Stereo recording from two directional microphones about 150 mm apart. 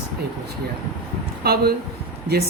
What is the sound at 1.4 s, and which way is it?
Speech, 90° right.